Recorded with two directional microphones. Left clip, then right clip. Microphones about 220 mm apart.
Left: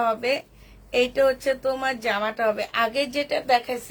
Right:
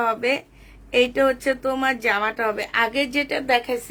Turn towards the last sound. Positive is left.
turn(degrees=-35)  # may be behind; listen again after turning